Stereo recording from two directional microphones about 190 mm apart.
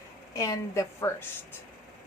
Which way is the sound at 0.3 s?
15° left (ahead or behind).